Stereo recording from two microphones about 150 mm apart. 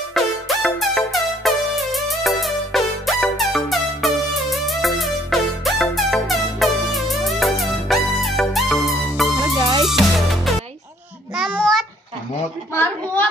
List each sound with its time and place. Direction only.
0.1 s music: centre (ahead or behind)
9.6 s music: 30° right (ahead or behind)
9.8 s music: centre (ahead or behind)
11.5 s child singing: 5° left (ahead or behind)
12.7 s a sound: 10° left (ahead or behind)